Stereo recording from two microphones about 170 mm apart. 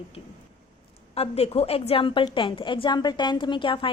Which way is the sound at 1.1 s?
35° left (ahead or behind).